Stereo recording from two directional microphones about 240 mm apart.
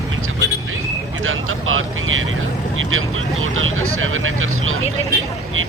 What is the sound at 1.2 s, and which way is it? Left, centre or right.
Speech, right.